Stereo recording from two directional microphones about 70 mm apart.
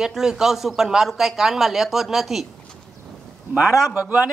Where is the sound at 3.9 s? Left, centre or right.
Right.